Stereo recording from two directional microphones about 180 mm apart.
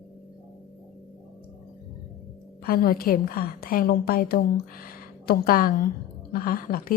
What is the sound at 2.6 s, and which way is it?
A woman's voice, 55° left (ahead or behind).